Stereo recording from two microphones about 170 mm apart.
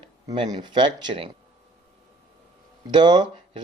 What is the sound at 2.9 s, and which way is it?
Speech, 25° right (ahead or behind).